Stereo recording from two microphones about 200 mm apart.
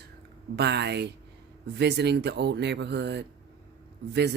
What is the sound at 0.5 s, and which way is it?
Speech, 55° right (ahead or behind).